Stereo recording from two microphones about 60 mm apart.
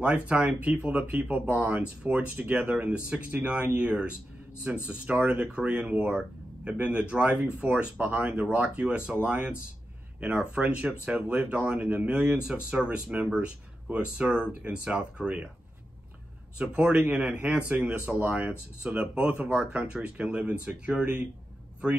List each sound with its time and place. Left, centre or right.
0.0 s speech: right
10.6 s speech: right
16.5 s speech: centre